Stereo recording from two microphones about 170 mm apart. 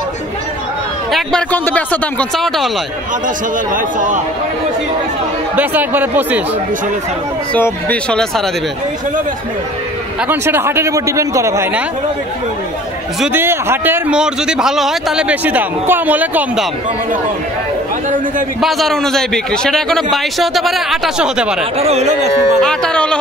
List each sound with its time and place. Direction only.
1.1 s a man's voice: 5° left (ahead or behind)
3.7 s speech: 50° right (ahead or behind)
5.6 s a man's voice: 10° right (ahead or behind)
7.5 s speech: 10° left (ahead or behind)
10.2 s a man's voice: 15° right (ahead or behind)
13.2 s a man's voice: 10° right (ahead or behind)
18.6 s a man's voice: centre (ahead or behind)
21.7 s speech: 40° right (ahead or behind)
22.6 s a man's voice: 5° left (ahead or behind)